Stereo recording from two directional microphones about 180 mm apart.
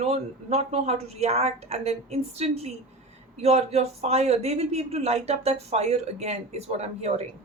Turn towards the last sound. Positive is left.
turn(degrees=-35)  # may be behind; listen again after turning